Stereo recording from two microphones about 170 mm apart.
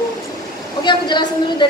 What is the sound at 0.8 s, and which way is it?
Speech, 25° left (ahead or behind).